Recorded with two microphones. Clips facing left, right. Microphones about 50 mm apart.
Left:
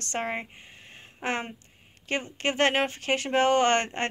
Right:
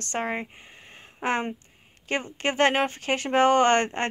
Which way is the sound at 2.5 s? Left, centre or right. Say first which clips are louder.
Right 2 dB; centre.